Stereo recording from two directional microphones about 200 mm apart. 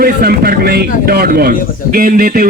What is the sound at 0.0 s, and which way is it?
A man's voice, 50° right (ahead or behind).